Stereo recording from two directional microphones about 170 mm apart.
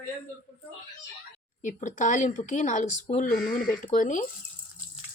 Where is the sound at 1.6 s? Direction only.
45° left (ahead or behind).